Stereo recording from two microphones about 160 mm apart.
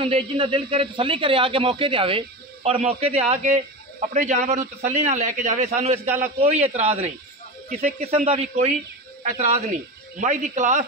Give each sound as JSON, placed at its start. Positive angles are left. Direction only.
{"t": 0.0, "sound": "a man's voice", "side_deg": -35}